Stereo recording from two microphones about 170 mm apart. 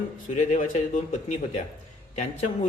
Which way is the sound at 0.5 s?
45° left (ahead or behind).